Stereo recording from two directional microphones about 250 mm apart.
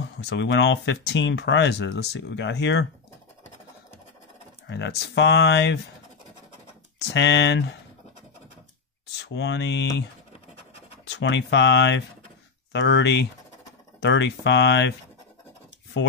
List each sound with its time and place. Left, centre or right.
0.0 s speech: left
4.6 s speech: left
7.1 s speech: left
9.2 s speech: left
11.1 s speech: left